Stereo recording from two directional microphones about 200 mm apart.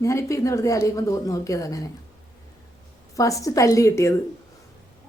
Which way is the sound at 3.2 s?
15° left (ahead or behind).